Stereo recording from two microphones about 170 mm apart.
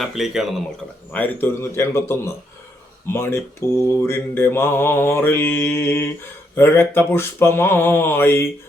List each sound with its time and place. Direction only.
0.0 s speech: centre (ahead or behind)
1.1 s mantra: 10° left (ahead or behind)